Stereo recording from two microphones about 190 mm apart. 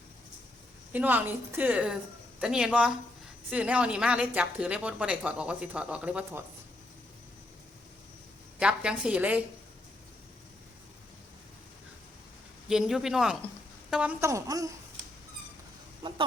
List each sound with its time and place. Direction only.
0.9 s a woman's voice: 10° right (ahead or behind)
8.5 s speech: 5° right (ahead or behind)
12.6 s a woman's voice: 5° right (ahead or behind); by 14.7 s 20° right (ahead or behind)
16.0 s speech: 30° right (ahead or behind)